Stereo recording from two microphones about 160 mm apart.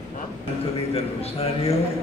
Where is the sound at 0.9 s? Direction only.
40° left (ahead or behind).